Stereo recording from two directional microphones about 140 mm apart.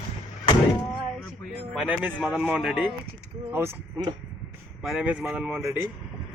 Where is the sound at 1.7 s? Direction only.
10° right (ahead or behind).